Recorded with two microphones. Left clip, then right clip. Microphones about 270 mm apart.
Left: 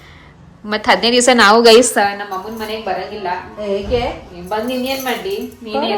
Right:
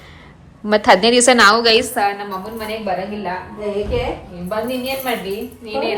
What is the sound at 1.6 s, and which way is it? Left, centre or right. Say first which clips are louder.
Speech: left 6 dB; left.